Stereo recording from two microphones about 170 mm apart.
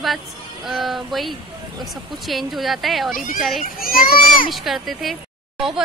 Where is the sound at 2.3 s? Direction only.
Centre (ahead or behind).